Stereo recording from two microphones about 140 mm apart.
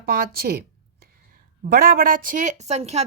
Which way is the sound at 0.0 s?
90° right.